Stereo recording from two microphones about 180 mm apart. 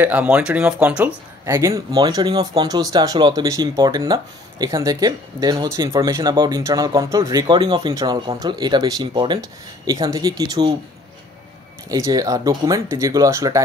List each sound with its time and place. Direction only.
0.0 s speech: 10° right (ahead or behind)
11.9 s speech: 20° right (ahead or behind)